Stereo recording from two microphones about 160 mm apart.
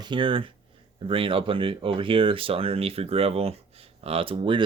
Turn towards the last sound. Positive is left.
turn(degrees=-30)  # may be behind; listen again after turning